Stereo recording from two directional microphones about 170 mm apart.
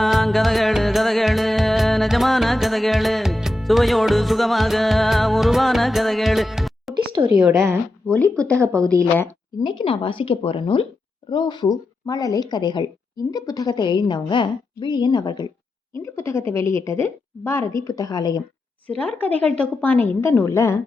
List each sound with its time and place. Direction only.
0.0 s music: centre (ahead or behind)
6.9 s a sound: 30° right (ahead or behind)
7.3 s a woman's voice: 15° right (ahead or behind)
8.0 s a woman's voice: 5° left (ahead or behind)
9.6 s a woman's voice: 30° left (ahead or behind)
16.0 s a woman's voice: 15° left (ahead or behind)
18.9 s a woman's voice: 10° left (ahead or behind)